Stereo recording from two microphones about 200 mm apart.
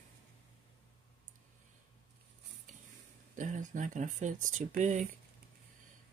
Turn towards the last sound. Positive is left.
turn(degrees=-35)  # may be behind; listen again after turning